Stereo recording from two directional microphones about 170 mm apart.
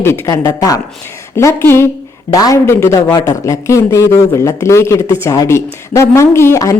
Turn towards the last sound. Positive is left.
turn(degrees=15)  # may be behind; listen again after turning